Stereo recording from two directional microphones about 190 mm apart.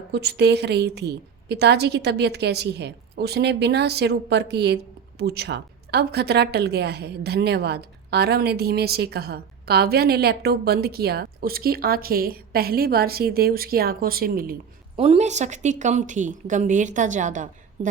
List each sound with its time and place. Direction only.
0.1 s a woman's voice: 60° right (ahead or behind)
14.9 s speech: 30° right (ahead or behind)